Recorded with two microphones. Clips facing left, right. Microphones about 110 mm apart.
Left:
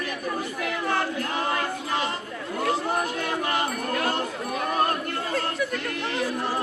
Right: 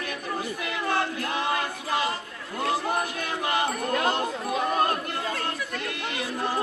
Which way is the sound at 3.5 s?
20° right (ahead or behind).